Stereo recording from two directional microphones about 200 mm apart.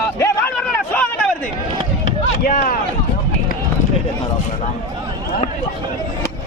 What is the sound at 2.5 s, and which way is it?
Speech, 45° left (ahead or behind).